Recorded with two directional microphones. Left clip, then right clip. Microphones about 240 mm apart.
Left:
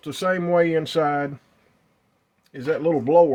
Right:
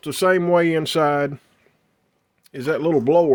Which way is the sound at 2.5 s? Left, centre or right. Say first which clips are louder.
Right 1 dB; right.